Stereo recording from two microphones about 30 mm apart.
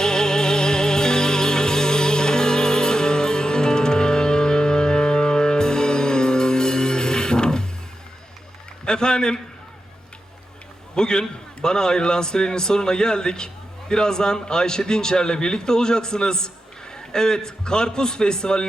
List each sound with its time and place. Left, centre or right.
0.0 s music: left
8.8 s a man's voice: left
10.9 s a man's voice: left